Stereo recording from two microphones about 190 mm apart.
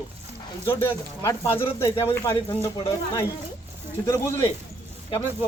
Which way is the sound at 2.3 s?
25° left (ahead or behind).